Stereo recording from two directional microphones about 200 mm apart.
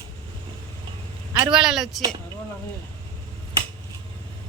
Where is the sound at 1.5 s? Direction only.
5° right (ahead or behind).